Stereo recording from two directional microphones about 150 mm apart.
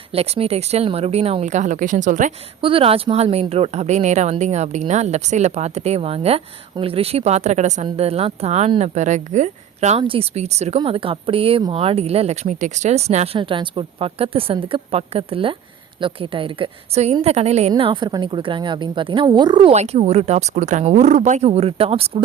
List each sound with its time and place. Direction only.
0.1 s speech: 40° right (ahead or behind); by 2.3 s 60° right (ahead or behind)
2.6 s speech: 35° right (ahead or behind)
10.0 s speech: 40° right (ahead or behind)
17.7 s speech: 35° right (ahead or behind)
19.7 s speech: 45° right (ahead or behind)